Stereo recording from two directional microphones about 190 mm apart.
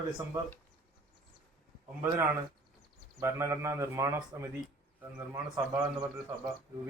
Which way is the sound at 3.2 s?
15° right (ahead or behind).